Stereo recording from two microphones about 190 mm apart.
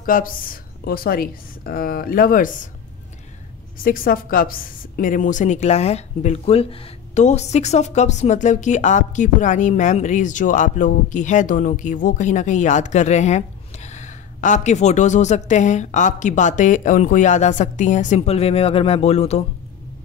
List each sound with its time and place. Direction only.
0.0 s a woman's voice: 45° left (ahead or behind)
3.7 s a woman's voice: 50° left (ahead or behind)